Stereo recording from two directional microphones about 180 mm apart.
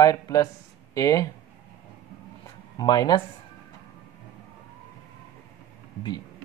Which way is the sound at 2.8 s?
20° left (ahead or behind).